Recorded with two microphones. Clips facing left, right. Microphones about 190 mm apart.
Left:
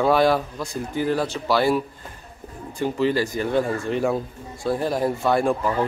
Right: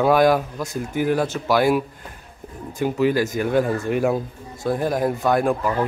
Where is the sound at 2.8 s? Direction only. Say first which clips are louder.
Right 2 dB; 10° right (ahead or behind).